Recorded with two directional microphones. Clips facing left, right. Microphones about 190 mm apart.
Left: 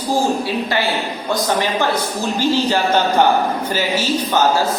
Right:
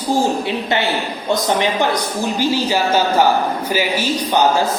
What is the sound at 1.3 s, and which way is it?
Speech, 20° right (ahead or behind).